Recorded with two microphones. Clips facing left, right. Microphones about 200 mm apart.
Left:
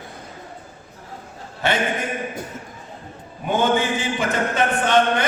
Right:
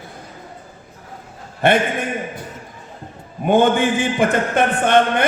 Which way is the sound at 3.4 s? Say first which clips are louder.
Right 5 dB; 55° right (ahead or behind).